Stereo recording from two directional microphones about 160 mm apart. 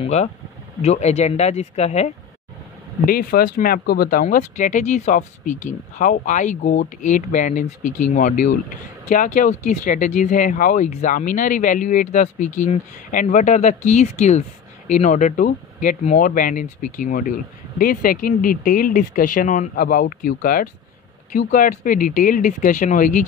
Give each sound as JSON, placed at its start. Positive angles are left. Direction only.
{"t": 0.0, "sound": "speech", "side_deg": 45}
{"t": 3.1, "sound": "speech", "side_deg": 70}